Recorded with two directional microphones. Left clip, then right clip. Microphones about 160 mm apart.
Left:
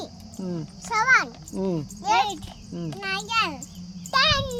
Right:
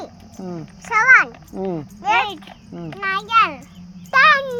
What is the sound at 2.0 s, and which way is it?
A child's voice, 30° left (ahead or behind).